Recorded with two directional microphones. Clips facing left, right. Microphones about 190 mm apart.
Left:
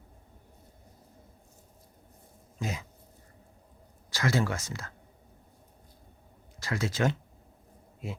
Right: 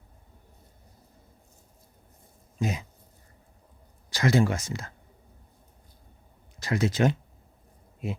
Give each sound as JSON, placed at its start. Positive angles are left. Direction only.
{"t": 2.6, "sound": "speech", "side_deg": -20}
{"t": 4.1, "sound": "speech", "side_deg": -20}
{"t": 6.6, "sound": "speech", "side_deg": -20}